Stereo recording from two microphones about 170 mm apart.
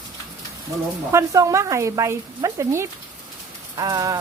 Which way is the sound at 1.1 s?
20° right (ahead or behind).